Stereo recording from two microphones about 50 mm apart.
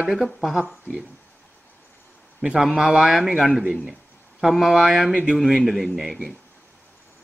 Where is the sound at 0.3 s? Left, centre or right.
Centre.